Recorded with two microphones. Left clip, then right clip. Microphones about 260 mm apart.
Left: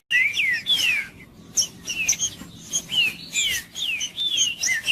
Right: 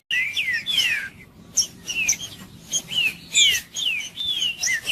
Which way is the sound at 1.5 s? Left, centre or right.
Centre.